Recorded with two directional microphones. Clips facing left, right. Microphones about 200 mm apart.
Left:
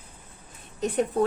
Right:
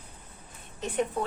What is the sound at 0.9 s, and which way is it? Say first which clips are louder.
Speech: left 5 dB; 40° left (ahead or behind).